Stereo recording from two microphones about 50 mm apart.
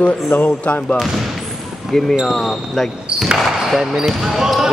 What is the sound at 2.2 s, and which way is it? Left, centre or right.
Speech, centre.